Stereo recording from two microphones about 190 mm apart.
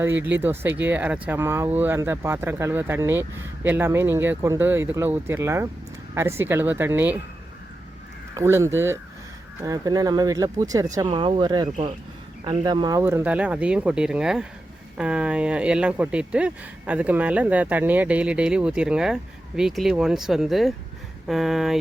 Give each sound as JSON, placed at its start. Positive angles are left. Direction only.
{"t": 0.0, "sound": "speech", "side_deg": -10}
{"t": 8.4, "sound": "speech", "side_deg": -15}